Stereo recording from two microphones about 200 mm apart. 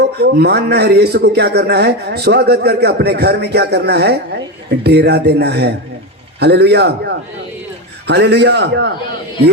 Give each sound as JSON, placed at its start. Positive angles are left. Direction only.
{"t": 0.0, "sound": "a man's voice", "side_deg": -55}